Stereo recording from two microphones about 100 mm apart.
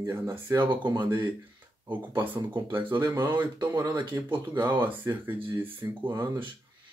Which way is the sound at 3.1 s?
25° right (ahead or behind).